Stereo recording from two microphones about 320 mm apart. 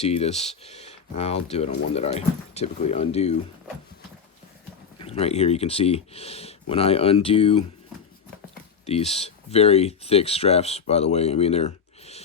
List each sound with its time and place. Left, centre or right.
0.0 s speech: centre
4.9 s speech: centre
8.9 s speech: centre